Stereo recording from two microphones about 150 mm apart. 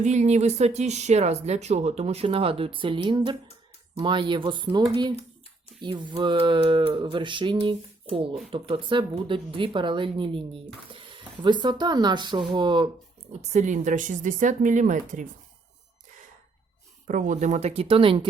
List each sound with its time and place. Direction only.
0.0 s speech: 50° right (ahead or behind); by 12.9 s 30° right (ahead or behind)
13.5 s a woman's voice: 55° right (ahead or behind)
17.1 s speech: 60° right (ahead or behind); by 18.3 s 35° right (ahead or behind)